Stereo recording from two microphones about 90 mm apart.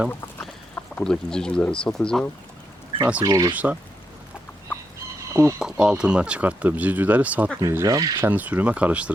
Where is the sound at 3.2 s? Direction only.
40° right (ahead or behind).